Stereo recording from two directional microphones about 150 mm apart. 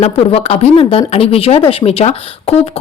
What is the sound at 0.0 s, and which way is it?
Speech, 40° left (ahead or behind).